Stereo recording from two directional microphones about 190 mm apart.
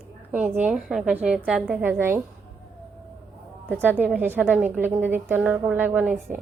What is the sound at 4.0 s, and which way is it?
A woman's voice, 10° right (ahead or behind).